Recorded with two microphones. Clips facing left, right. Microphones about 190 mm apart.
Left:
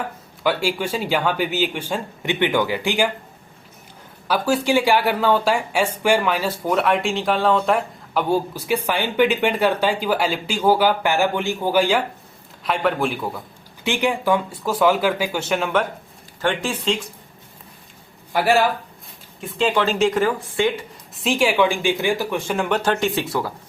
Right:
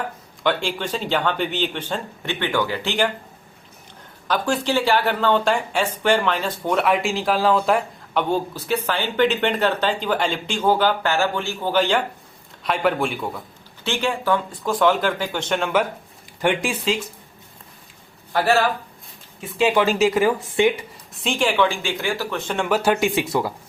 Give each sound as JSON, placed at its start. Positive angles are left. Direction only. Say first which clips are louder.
{"t": 0.4, "sound": "speech", "louder": "left 2 dB", "side_deg": 10}
{"t": 4.3, "sound": "a man's voice", "louder": "left 2 dB", "side_deg": 10}
{"t": 13.8, "sound": "speech", "louder": "left 2 dB", "side_deg": 15}
{"t": 16.4, "sound": "speech", "louder": "right 1 dB", "side_deg": -10}
{"t": 18.3, "sound": "speech", "louder": "left 1 dB", "side_deg": 15}
{"t": 19.4, "sound": "speech", "louder": "right 1 dB", "side_deg": -10}
{"t": 20.6, "sound": "speech", "louder": "right 3 dB", "side_deg": -20}
{"t": 21.2, "sound": "speech", "louder": "left 2 dB", "side_deg": 5}